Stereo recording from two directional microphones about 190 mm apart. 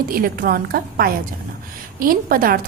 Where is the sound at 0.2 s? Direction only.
50° right (ahead or behind).